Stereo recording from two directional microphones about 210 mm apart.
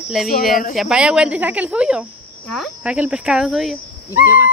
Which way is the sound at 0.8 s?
5° right (ahead or behind).